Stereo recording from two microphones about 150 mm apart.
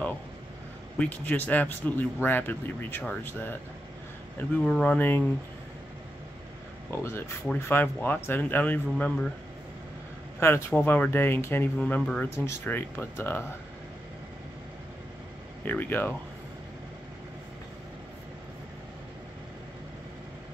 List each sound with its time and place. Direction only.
0.9 s speech: 10° left (ahead or behind)
6.9 s speech: 15° left (ahead or behind)
10.4 s speech: 15° left (ahead or behind)
15.6 s speech: 15° left (ahead or behind)